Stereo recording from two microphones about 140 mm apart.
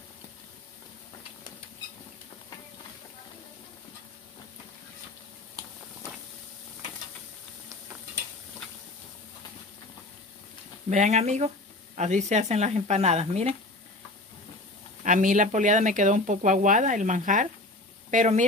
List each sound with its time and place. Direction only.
10.9 s speech: 55° right (ahead or behind)
15.0 s speech: 65° right (ahead or behind)